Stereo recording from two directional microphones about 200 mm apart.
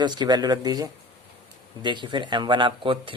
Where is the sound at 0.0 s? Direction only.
20° right (ahead or behind).